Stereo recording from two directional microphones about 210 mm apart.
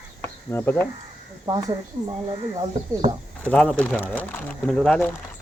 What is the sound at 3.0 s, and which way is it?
Speech, 25° right (ahead or behind).